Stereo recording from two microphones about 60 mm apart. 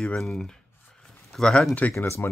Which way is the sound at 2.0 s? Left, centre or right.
Left.